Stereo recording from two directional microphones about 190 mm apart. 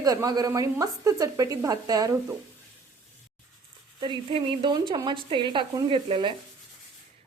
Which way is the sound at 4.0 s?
25° right (ahead or behind).